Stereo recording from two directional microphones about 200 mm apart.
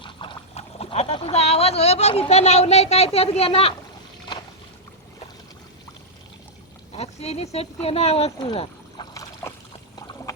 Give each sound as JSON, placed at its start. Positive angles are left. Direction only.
{"t": 0.0, "sound": "clip-clop", "side_deg": 25}
{"t": 6.9, "sound": "speech", "side_deg": 30}
{"t": 9.4, "sound": "a sound", "side_deg": 15}
{"t": 10.3, "sound": "water", "side_deg": 15}